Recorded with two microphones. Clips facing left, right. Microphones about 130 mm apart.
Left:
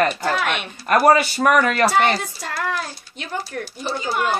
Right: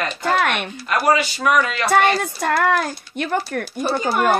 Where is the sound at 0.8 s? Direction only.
50° left (ahead or behind).